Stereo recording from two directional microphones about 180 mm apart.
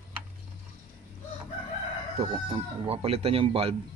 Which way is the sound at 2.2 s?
30° right (ahead or behind).